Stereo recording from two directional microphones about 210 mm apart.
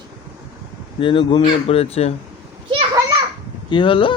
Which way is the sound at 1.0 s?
25° left (ahead or behind).